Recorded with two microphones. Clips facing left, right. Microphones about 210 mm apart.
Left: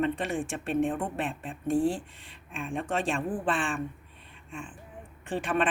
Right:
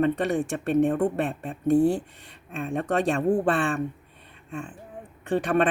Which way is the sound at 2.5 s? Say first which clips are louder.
Right 5 dB; 40° right (ahead or behind).